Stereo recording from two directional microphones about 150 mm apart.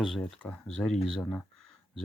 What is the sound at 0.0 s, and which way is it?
Speech, 5° left (ahead or behind).